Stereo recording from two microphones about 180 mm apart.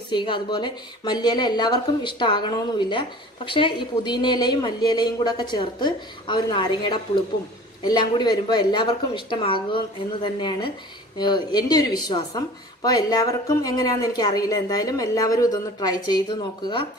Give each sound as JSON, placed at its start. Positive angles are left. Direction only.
{"t": 0.1, "sound": "speech", "side_deg": 25}